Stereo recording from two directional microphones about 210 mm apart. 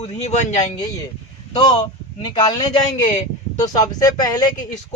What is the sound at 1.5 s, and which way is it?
Speech, 20° left (ahead or behind).